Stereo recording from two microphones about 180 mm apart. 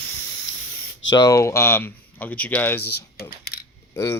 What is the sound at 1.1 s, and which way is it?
Speech, 20° left (ahead or behind).